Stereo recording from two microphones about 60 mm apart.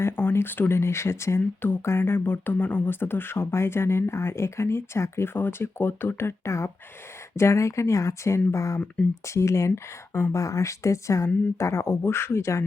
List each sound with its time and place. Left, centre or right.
0.0 s speech: left
10.3 s speech: left